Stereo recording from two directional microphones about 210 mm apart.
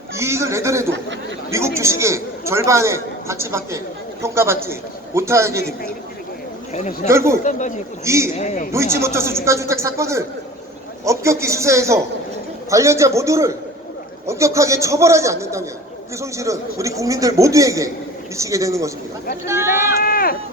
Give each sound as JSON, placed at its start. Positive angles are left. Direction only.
{"t": 0.1, "sound": "a man's voice", "side_deg": -15}
{"t": 6.7, "sound": "speech", "side_deg": 35}
{"t": 7.1, "sound": "a man's voice", "side_deg": -15}
{"t": 8.4, "sound": "speech", "side_deg": 35}
{"t": 8.7, "sound": "a man's voice", "side_deg": -15}
{"t": 20.0, "sound": "run", "side_deg": 45}